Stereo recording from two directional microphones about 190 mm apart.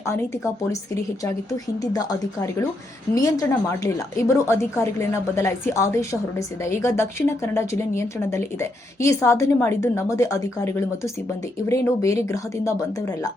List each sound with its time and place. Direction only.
1.8 s speech: 20° left (ahead or behind)
3.1 s speech: 10° left (ahead or behind)